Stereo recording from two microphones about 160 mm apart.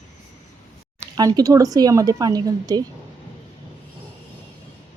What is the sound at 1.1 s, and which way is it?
A woman's voice, 25° right (ahead or behind).